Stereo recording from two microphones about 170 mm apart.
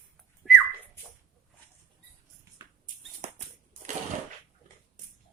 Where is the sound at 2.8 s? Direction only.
45° right (ahead or behind).